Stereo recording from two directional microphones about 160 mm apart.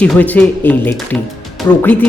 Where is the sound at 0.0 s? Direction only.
10° left (ahead or behind).